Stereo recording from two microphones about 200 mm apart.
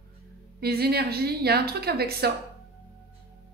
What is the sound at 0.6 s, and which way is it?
A woman's voice, 50° right (ahead or behind).